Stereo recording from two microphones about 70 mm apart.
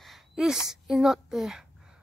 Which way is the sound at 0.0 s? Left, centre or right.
Centre.